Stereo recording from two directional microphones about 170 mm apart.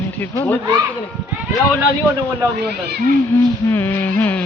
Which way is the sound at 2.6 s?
70° right (ahead or behind).